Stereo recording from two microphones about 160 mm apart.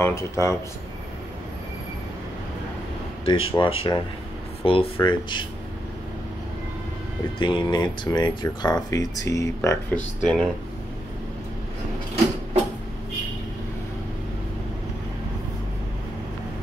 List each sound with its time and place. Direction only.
0.0 s speech: 15° left (ahead or behind)
3.3 s speech: 30° left (ahead or behind)
7.3 s speech: 30° left (ahead or behind); by 10.5 s 5° left (ahead or behind)